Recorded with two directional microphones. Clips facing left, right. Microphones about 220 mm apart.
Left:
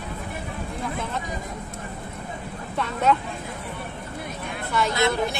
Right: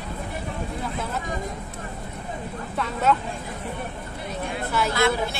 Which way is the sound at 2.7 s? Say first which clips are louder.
Left 1 dB; centre (ahead or behind).